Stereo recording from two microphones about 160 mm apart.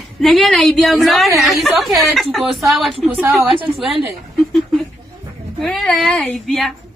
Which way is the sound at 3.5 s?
35° right (ahead or behind).